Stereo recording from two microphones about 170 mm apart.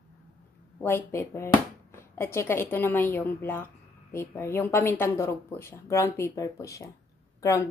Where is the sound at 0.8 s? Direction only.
15° left (ahead or behind).